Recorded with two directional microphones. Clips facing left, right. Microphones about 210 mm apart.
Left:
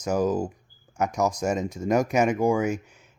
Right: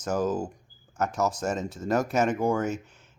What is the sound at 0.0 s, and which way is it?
Speech, 10° left (ahead or behind).